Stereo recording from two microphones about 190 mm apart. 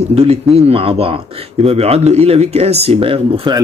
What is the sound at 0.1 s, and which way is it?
Speech, 30° right (ahead or behind).